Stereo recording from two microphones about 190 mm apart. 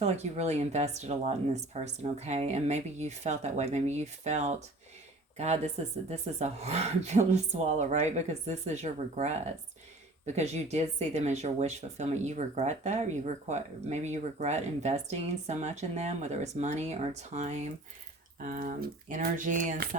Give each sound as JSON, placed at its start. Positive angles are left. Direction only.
{"t": 0.0, "sound": "speech", "side_deg": -35}